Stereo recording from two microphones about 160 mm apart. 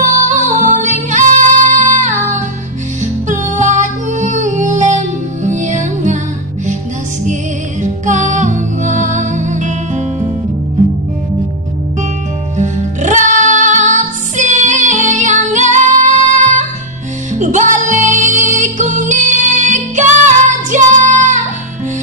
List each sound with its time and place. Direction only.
0.0 s music: 50° right (ahead or behind)
7.8 s music: 50° right (ahead or behind)
12.5 s music: 50° right (ahead or behind)